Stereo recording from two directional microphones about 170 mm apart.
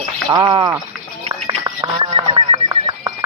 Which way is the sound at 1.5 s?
25° right (ahead or behind).